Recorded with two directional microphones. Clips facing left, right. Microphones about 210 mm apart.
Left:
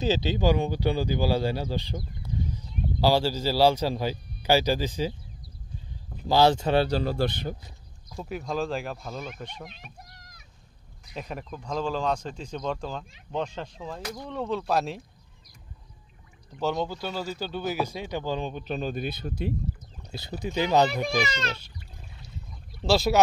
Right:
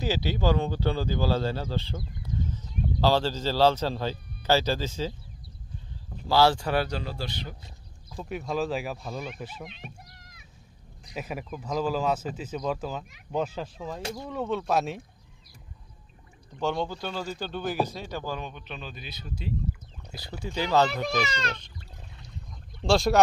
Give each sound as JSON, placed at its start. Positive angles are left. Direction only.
{"t": 0.0, "sound": "speech", "side_deg": 20}
{"t": 6.2, "sound": "speech", "side_deg": 20}
{"t": 7.2, "sound": "speech", "side_deg": 55}
{"t": 8.2, "sound": "speech", "side_deg": 0}
{"t": 9.7, "sound": "a sound", "side_deg": 40}
{"t": 11.1, "sound": "speech", "side_deg": -5}
{"t": 16.5, "sound": "speech", "side_deg": 5}
{"t": 18.5, "sound": "speech", "side_deg": 40}
{"t": 20.1, "sound": "a child's voice", "side_deg": 25}